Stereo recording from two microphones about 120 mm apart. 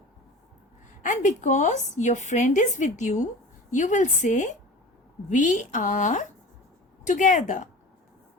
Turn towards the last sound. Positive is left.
turn(degrees=90)